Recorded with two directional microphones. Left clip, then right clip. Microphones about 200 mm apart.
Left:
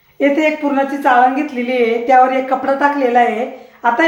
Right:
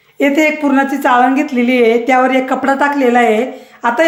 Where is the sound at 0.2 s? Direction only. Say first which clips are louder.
Right 2 dB; 60° right (ahead or behind).